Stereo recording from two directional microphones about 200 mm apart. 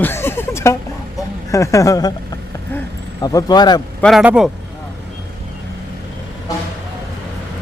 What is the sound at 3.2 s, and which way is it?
Speech, 20° left (ahead or behind).